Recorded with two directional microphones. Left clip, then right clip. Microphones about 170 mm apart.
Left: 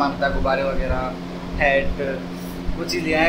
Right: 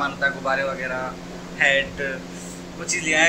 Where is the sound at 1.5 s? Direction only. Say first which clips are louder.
Even; 5° left (ahead or behind).